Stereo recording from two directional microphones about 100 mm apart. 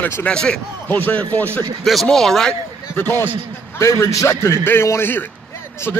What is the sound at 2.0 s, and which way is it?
Speech, 5° left (ahead or behind).